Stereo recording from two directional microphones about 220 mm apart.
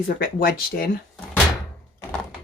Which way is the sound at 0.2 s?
40° left (ahead or behind).